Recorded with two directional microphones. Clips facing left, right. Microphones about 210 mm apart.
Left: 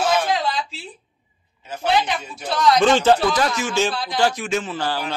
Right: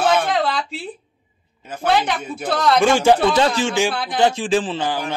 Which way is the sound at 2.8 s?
10° right (ahead or behind).